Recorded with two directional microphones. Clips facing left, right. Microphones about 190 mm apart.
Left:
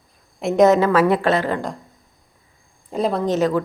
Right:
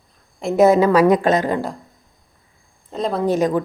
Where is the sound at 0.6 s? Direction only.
10° right (ahead or behind).